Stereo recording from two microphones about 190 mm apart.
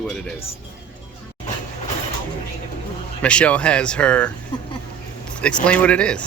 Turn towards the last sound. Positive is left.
turn(degrees=5)  # may be behind; listen again after turning